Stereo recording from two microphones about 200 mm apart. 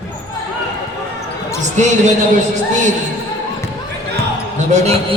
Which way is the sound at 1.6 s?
35° right (ahead or behind).